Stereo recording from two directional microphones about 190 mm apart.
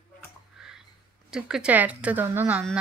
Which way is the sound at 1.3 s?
5° right (ahead or behind).